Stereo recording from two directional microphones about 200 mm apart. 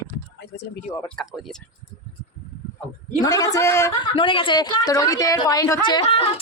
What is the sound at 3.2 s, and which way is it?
Speech, 20° left (ahead or behind).